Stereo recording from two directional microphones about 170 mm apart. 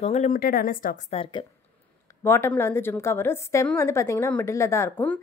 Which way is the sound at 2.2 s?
15° left (ahead or behind).